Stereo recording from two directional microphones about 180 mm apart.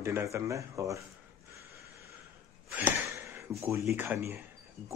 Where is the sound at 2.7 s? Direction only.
10° right (ahead or behind).